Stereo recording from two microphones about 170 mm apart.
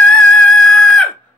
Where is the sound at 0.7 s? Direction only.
5° left (ahead or behind).